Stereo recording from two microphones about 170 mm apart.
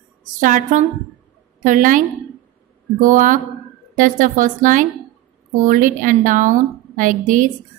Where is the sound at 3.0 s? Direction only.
50° right (ahead or behind).